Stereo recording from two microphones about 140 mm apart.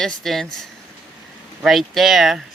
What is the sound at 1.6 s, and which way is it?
Speech, centre (ahead or behind).